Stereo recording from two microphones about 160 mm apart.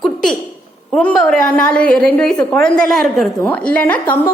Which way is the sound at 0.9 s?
5° left (ahead or behind).